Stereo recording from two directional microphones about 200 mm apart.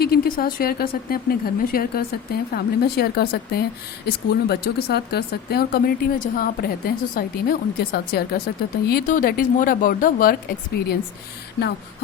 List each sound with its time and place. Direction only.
0.0 s speech: 50° left (ahead or behind)